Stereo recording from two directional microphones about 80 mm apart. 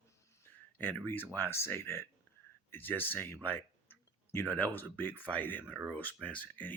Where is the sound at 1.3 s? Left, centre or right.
Left.